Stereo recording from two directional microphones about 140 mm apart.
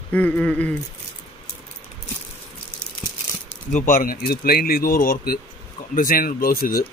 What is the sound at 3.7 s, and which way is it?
Speech, 70° left (ahead or behind).